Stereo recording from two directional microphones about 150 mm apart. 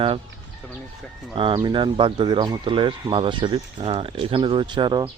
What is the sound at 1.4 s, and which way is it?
Speech, 35° right (ahead or behind).